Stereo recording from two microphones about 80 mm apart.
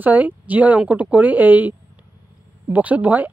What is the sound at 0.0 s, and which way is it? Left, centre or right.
Speech, right.